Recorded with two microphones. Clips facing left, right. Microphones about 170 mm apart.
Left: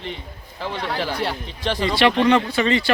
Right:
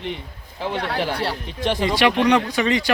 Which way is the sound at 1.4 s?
15° right (ahead or behind).